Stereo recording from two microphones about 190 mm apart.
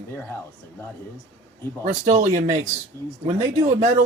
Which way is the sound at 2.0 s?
40° right (ahead or behind).